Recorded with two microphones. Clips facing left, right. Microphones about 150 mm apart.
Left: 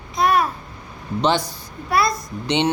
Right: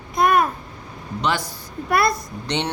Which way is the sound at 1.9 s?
55° right (ahead or behind).